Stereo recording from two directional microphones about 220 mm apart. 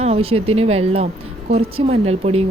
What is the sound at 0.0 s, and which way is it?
Speech, 25° right (ahead or behind).